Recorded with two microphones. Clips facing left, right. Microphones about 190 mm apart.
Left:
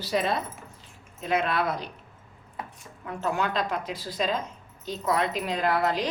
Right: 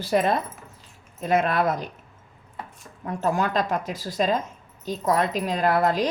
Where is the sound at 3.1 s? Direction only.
40° right (ahead or behind).